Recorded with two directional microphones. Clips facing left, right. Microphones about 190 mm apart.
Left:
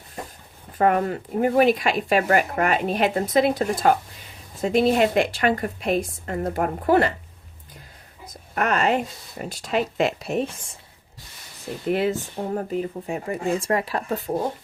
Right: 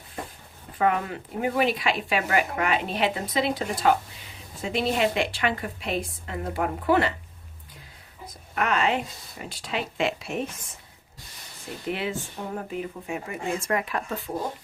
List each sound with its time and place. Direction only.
0.8 s speech: 45° left (ahead or behind)
8.3 s a woman's voice: 45° left (ahead or behind); by 10.8 s 30° left (ahead or behind)
11.9 s speech: 40° left (ahead or behind)